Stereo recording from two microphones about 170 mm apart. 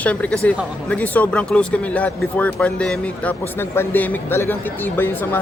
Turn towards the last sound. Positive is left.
turn(degrees=10)  # may be behind; listen again after turning